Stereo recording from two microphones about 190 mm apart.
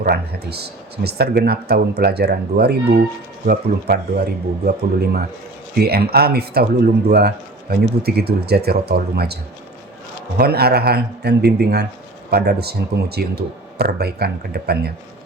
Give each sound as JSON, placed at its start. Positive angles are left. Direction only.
{"t": 0.0, "sound": "speech", "side_deg": -55}